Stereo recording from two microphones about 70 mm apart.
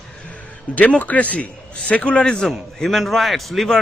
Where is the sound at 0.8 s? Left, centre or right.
Left.